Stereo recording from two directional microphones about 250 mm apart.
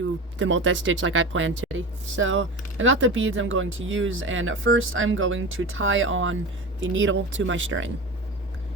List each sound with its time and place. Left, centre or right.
0.3 s speech: right